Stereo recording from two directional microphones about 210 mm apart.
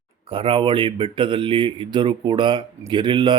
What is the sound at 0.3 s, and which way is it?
Speech, 25° right (ahead or behind).